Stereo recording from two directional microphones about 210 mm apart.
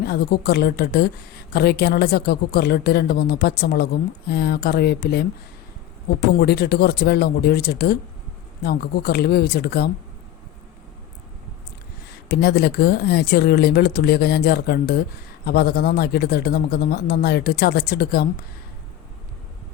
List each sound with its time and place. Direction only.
0.0 s a woman's voice: 50° left (ahead or behind)
12.1 s a woman's voice: 50° left (ahead or behind)